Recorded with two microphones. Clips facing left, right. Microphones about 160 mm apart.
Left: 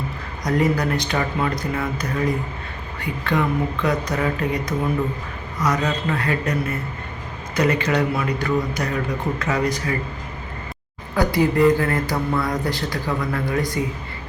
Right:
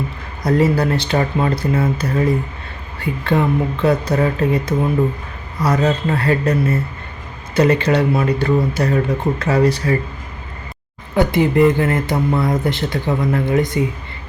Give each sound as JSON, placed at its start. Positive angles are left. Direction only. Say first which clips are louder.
{"t": 0.4, "sound": "speech", "louder": "right 5 dB", "side_deg": -30}
{"t": 11.1, "sound": "speech", "louder": "right 4 dB", "side_deg": -25}